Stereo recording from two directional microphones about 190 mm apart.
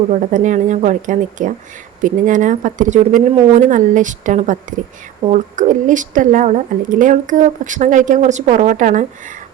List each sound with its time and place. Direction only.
0.1 s speech: 40° right (ahead or behind)